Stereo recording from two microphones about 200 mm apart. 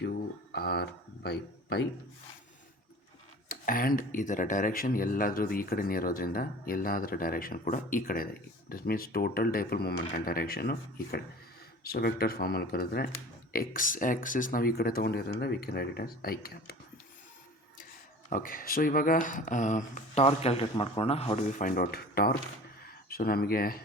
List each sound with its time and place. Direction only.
0.0 s a sound: 50° left (ahead or behind)
3.5 s speech: 45° left (ahead or behind)
18.3 s speech: 45° left (ahead or behind)